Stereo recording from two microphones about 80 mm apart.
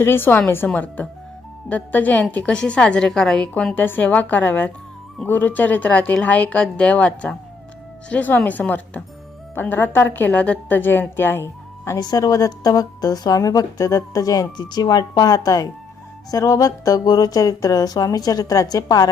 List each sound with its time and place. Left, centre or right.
0.0 s a woman's voice: left; by 3.5 s centre
3.8 s a woman's voice: left
11.9 s speech: left